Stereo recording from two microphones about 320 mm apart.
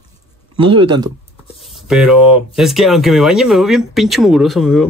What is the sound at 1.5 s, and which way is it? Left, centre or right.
Speech, centre.